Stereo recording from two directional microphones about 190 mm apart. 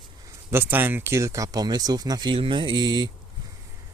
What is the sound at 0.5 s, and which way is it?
Speech, 10° right (ahead or behind).